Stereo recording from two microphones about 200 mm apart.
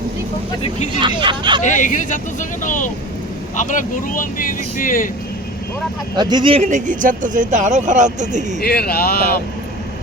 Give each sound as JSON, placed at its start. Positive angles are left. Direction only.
{"t": 0.9, "sound": "speech", "side_deg": -25}
{"t": 1.6, "sound": "speech", "side_deg": 40}
{"t": 6.1, "sound": "speech", "side_deg": -20}
{"t": 8.6, "sound": "speech", "side_deg": 50}